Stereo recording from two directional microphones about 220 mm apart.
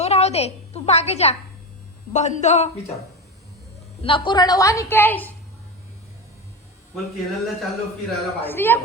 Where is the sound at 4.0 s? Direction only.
25° left (ahead or behind).